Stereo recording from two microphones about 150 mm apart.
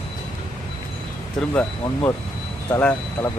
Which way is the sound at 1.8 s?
25° left (ahead or behind).